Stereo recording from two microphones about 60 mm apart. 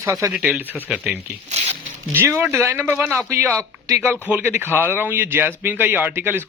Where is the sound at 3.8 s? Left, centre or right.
Right.